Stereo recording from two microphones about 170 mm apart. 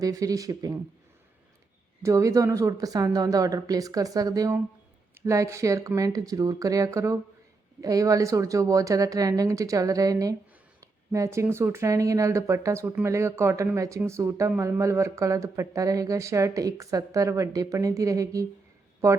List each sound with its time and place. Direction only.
0.0 s a woman's voice: 20° right (ahead or behind)
2.0 s a woman's voice: 20° right (ahead or behind)